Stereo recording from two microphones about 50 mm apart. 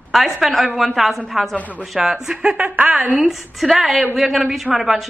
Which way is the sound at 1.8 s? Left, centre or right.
Centre.